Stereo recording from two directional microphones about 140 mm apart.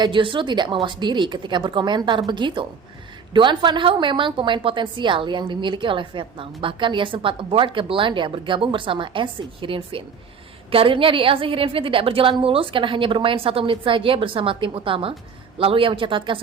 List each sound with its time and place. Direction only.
0.0 s a woman's voice: 35° right (ahead or behind)